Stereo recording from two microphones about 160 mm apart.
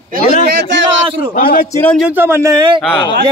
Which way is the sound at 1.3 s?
60° left (ahead or behind).